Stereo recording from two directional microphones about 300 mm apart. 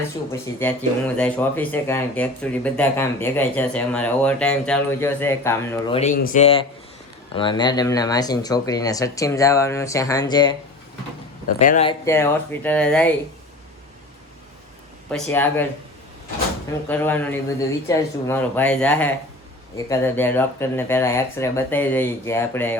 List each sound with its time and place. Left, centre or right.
0.3 s speech: centre
11.6 s speech: left
11.9 s speech: centre
15.1 s speech: centre
16.9 s speech: centre